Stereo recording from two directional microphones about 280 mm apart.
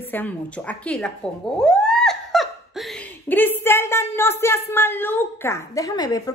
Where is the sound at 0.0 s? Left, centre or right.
Centre.